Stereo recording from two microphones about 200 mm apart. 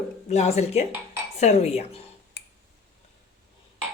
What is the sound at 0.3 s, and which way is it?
Speech, 35° left (ahead or behind).